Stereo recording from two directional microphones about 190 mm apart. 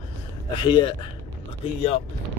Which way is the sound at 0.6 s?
25° left (ahead or behind).